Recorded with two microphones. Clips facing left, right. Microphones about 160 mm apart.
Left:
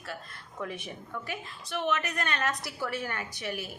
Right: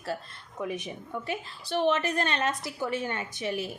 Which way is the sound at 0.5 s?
20° right (ahead or behind).